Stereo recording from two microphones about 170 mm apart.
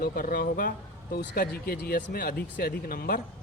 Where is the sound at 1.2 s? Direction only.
65° left (ahead or behind).